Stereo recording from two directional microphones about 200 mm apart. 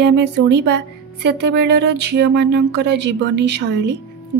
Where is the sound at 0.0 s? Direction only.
55° right (ahead or behind).